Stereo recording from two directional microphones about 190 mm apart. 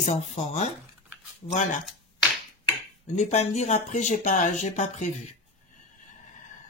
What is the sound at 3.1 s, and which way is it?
Speech, 35° left (ahead or behind).